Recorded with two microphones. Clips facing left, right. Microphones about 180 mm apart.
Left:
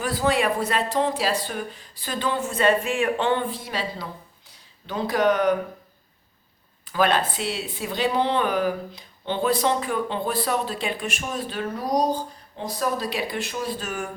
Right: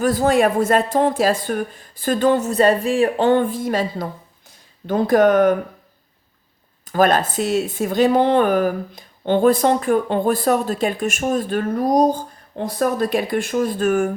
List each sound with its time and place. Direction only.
0.0 s speech: 45° right (ahead or behind)
6.8 s speech: 45° right (ahead or behind)